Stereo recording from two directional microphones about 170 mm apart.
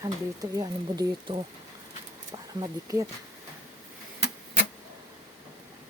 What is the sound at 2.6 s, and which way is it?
Speech, 20° right (ahead or behind).